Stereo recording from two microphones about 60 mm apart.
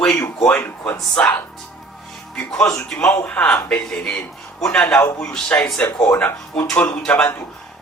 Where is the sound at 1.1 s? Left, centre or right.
Centre.